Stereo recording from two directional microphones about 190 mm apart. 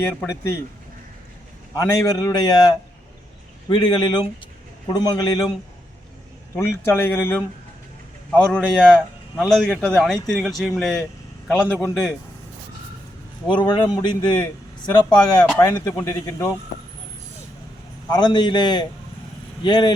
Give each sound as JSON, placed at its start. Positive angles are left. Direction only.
{"t": 0.0, "sound": "speech", "side_deg": 10}
{"t": 1.7, "sound": "a man's voice", "side_deg": 15}
{"t": 6.6, "sound": "speech", "side_deg": 10}
{"t": 13.5, "sound": "a man's voice", "side_deg": 25}
{"t": 18.1, "sound": "a man's voice", "side_deg": 20}